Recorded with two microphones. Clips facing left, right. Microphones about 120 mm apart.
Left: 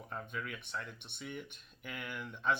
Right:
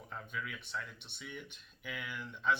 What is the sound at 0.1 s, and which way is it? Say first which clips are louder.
Speech: left 1 dB; 45° left (ahead or behind).